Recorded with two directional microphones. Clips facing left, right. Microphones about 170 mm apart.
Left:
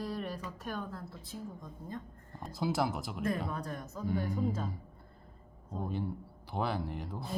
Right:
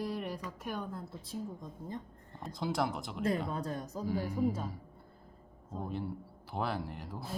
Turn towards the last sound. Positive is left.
turn(degrees=0)  # may be behind; listen again after turning